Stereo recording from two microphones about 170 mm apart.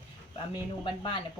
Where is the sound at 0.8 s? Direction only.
30° left (ahead or behind).